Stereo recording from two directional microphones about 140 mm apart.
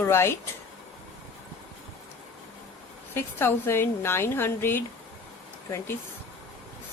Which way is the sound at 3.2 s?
15° left (ahead or behind).